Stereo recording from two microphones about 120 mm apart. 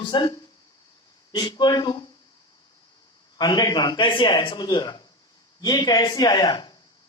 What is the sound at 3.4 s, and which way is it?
A man's voice, 35° left (ahead or behind).